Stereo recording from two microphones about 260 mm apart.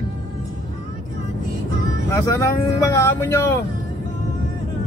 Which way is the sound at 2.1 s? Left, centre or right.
Centre.